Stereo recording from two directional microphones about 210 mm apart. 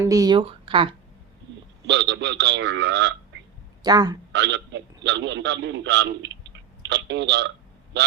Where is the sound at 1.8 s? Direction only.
55° right (ahead or behind).